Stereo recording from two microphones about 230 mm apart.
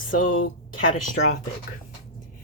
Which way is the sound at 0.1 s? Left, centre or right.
Left.